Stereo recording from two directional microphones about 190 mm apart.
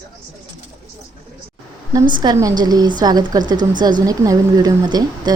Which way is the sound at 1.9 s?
25° right (ahead or behind).